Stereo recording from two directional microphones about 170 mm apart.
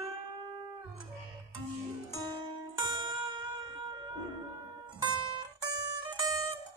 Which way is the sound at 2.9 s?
25° right (ahead or behind).